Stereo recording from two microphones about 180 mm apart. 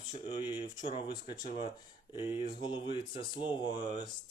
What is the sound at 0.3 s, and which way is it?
Speech, 20° left (ahead or behind).